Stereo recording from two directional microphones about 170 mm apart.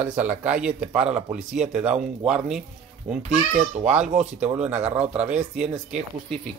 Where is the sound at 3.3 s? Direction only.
40° right (ahead or behind).